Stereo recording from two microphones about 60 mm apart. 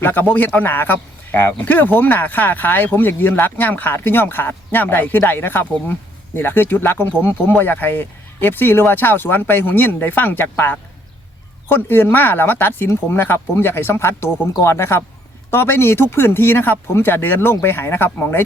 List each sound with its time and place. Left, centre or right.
0.0 s speech: left